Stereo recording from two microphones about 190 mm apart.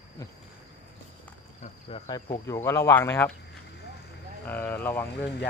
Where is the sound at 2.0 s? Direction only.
20° left (ahead or behind).